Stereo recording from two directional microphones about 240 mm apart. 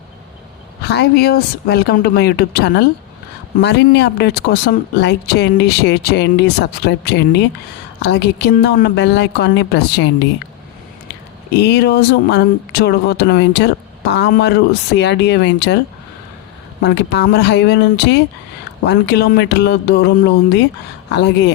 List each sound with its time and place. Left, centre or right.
0.8 s speech: left
11.5 s speech: left
16.8 s speech: left